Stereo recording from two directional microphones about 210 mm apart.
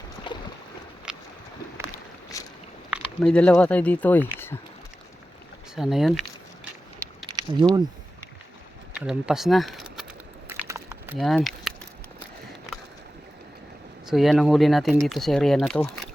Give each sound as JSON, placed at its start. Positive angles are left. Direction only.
{"t": 0.3, "sound": "boat", "side_deg": 20}
{"t": 1.1, "sound": "boat", "side_deg": -5}
{"t": 2.3, "sound": "biting", "side_deg": 15}
{"t": 2.9, "sound": "speech", "side_deg": 5}
{"t": 5.7, "sound": "speech", "side_deg": 0}
{"t": 7.3, "sound": "a sound", "side_deg": -20}
{"t": 9.0, "sound": "a sound", "side_deg": -5}
{"t": 11.2, "sound": "speech", "side_deg": 0}
{"t": 14.1, "sound": "speech", "side_deg": 0}